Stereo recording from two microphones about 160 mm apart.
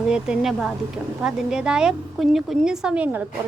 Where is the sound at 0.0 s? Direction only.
5° right (ahead or behind).